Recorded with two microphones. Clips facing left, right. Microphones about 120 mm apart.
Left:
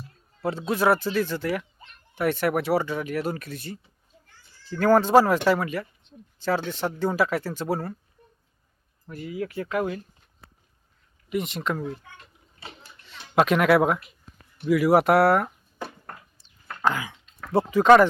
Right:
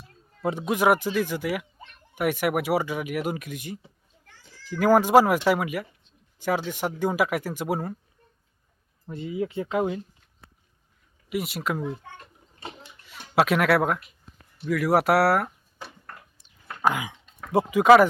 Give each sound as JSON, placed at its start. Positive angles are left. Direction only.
{"t": 0.4, "sound": "speech", "side_deg": -15}
{"t": 4.3, "sound": "children playing", "side_deg": -90}
{"t": 4.8, "sound": "speech", "side_deg": -10}
{"t": 9.0, "sound": "speech", "side_deg": -25}
{"t": 11.3, "sound": "speech", "side_deg": -5}
{"t": 12.0, "sound": "a sound", "side_deg": -45}
{"t": 13.1, "sound": "speech", "side_deg": -5}
{"t": 16.6, "sound": "a sound", "side_deg": -15}